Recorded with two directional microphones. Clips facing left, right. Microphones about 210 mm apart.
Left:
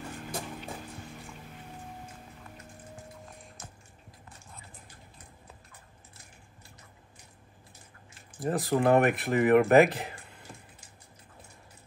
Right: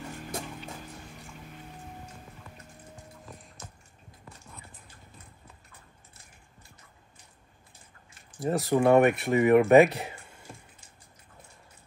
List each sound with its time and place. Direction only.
8.4 s speech: centre (ahead or behind)